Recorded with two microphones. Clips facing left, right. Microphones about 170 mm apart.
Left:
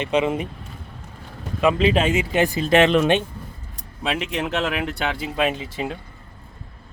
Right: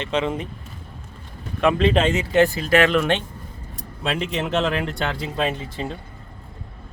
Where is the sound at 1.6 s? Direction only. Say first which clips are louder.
Even; 5° left (ahead or behind); by 3.2 s 20° left (ahead or behind).